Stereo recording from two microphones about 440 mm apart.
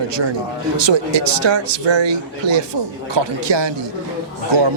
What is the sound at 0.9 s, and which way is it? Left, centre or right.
Speech, right.